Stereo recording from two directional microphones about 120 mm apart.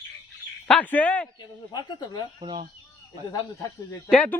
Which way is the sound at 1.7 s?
40° left (ahead or behind).